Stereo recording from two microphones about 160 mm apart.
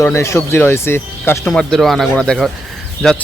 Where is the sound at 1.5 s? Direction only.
Centre (ahead or behind).